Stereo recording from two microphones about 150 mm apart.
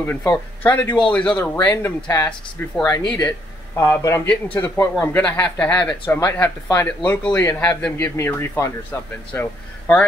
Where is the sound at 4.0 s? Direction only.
15° left (ahead or behind).